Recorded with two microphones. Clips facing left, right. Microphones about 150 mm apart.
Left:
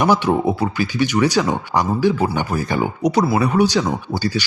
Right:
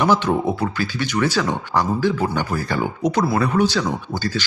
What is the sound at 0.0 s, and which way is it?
Speech, 15° left (ahead or behind).